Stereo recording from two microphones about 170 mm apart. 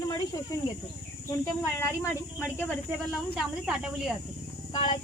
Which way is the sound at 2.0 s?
15° left (ahead or behind).